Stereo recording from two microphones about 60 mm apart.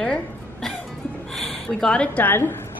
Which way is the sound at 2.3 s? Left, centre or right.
Left.